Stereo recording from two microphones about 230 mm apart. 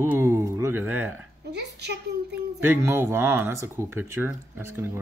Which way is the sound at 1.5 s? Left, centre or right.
Right.